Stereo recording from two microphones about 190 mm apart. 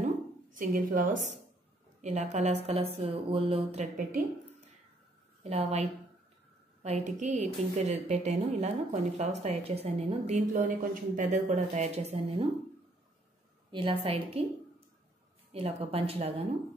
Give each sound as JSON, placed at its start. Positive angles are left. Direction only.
{"t": 0.6, "sound": "a woman's voice", "side_deg": -45}
{"t": 2.0, "sound": "a sound", "side_deg": -35}
{"t": 2.3, "sound": "a woman's voice", "side_deg": -35}
{"t": 5.4, "sound": "a woman's voice", "side_deg": -35}
{"t": 13.7, "sound": "a woman's voice", "side_deg": -25}
{"t": 15.5, "sound": "a woman's voice", "side_deg": -30}